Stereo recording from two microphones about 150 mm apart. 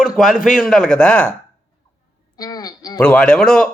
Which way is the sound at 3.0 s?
5° left (ahead or behind).